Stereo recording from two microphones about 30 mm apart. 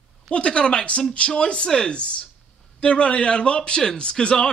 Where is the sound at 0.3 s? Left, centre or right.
Left.